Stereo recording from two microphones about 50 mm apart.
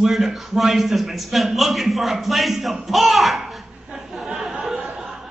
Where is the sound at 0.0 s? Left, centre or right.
Centre.